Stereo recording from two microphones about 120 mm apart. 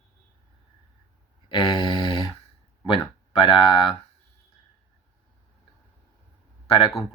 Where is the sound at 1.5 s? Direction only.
45° left (ahead or behind).